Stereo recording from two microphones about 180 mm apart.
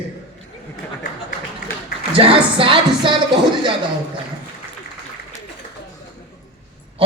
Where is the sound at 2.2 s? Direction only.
30° right (ahead or behind).